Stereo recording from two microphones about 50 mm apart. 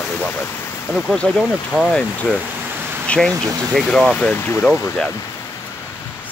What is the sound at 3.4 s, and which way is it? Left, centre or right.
Speech, centre.